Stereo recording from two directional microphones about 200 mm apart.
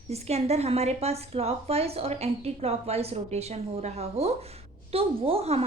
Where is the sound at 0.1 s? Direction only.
30° right (ahead or behind).